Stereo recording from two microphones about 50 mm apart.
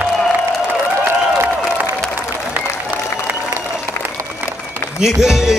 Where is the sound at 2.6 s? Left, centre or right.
Right.